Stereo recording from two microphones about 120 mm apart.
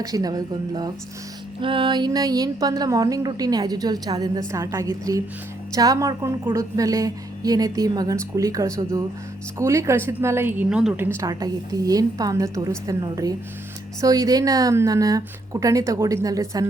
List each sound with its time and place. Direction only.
0.0 s a woman's voice: 30° right (ahead or behind)
1.6 s a woman's voice: 45° right (ahead or behind); by 10.7 s 20° right (ahead or behind)
10.7 s a woman's voice: 10° right (ahead or behind); by 16.6 s 30° right (ahead or behind)